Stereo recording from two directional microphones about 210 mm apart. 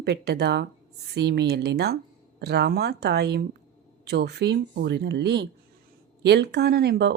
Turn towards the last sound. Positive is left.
turn(degrees=-55)  # may be behind; listen again after turning